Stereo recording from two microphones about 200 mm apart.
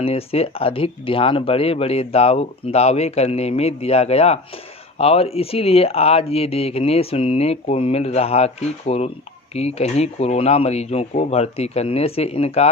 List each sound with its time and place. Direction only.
0.0 s speech: 30° left (ahead or behind)